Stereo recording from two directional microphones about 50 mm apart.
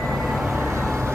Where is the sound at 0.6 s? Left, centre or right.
Right.